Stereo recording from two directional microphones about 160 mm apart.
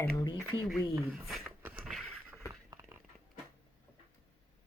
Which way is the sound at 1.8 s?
Centre (ahead or behind).